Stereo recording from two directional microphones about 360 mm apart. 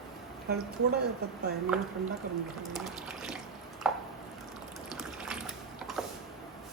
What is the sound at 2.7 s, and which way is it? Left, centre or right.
Water, centre.